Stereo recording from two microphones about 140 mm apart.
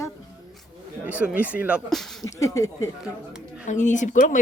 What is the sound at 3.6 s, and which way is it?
Speech, 60° left (ahead or behind).